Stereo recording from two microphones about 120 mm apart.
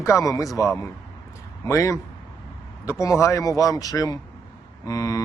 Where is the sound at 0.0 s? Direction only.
25° left (ahead or behind).